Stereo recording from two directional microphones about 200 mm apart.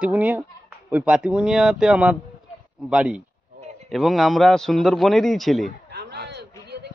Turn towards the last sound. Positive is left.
turn(degrees=-55)  # may be behind; listen again after turning